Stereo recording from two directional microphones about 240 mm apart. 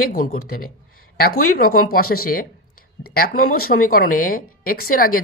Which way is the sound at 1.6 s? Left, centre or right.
Left.